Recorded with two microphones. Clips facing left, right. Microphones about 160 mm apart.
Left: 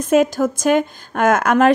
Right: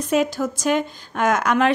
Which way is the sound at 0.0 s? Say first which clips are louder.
Left 5 dB; 50° left (ahead or behind).